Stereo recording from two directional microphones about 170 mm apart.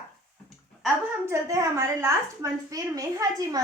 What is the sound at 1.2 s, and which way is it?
A woman's voice, 20° right (ahead or behind).